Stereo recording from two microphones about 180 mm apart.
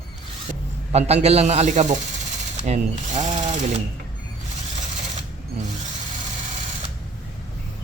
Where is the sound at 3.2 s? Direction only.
40° right (ahead or behind).